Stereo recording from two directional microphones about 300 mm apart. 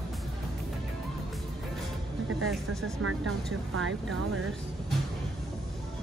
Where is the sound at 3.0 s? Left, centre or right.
Right.